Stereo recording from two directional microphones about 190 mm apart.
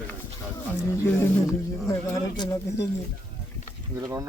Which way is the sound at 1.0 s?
15° left (ahead or behind).